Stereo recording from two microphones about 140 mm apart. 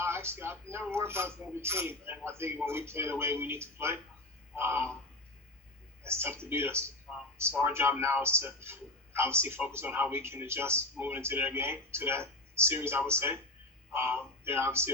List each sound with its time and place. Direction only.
0.0 s a man's voice: 15° right (ahead or behind)
6.0 s a man's voice: 20° right (ahead or behind)